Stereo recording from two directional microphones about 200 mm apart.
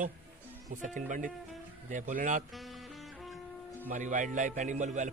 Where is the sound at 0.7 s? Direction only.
40° right (ahead or behind).